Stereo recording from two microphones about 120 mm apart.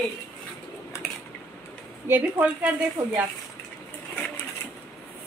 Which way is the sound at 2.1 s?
15° right (ahead or behind).